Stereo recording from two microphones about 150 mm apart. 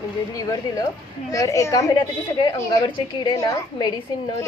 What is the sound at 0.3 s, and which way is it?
A woman's voice, 25° left (ahead or behind).